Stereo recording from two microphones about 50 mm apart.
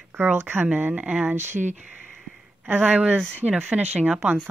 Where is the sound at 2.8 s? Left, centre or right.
Right.